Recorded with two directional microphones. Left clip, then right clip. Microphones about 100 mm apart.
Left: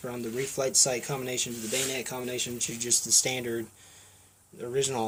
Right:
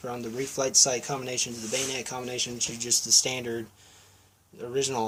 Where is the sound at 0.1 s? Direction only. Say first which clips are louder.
Even; 35° left (ahead or behind).